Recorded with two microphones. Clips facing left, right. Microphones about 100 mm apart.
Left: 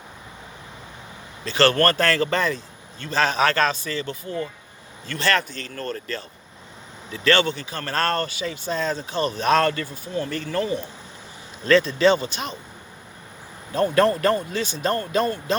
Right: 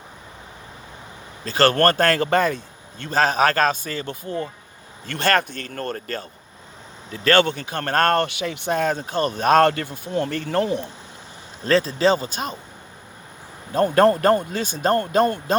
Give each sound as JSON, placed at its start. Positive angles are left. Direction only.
{"t": 1.5, "sound": "speech", "side_deg": -45}
{"t": 11.6, "sound": "speech", "side_deg": -35}
{"t": 13.7, "sound": "speech", "side_deg": -45}